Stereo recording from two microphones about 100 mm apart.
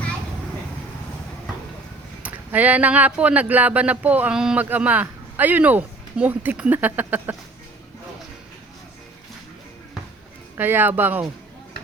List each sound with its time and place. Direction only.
2.2 s a man's voice: 15° right (ahead or behind)
10.6 s speech: 20° right (ahead or behind)